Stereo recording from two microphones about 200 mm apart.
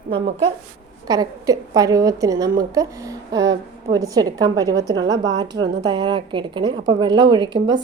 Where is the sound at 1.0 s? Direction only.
20° right (ahead or behind).